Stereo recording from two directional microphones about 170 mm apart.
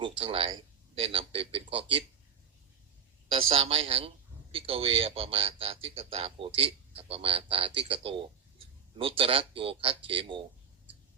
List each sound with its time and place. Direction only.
0.0 s speech: 35° right (ahead or behind)
3.3 s speech: 35° right (ahead or behind)